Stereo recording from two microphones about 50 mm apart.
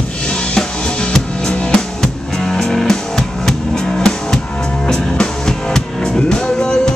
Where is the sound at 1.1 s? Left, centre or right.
Centre.